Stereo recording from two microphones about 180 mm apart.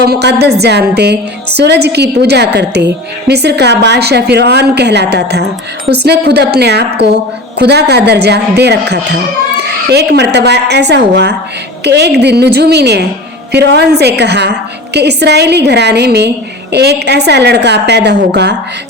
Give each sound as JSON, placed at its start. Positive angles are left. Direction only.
{"t": 0.0, "sound": "a woman's voice", "side_deg": -65}